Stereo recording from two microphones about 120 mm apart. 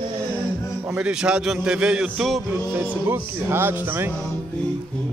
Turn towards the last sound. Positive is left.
turn(degrees=-20)  # may be behind; listen again after turning